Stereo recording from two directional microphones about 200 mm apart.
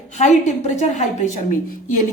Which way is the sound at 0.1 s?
35° left (ahead or behind).